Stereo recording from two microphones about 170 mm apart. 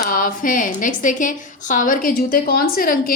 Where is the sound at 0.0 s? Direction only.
55° left (ahead or behind).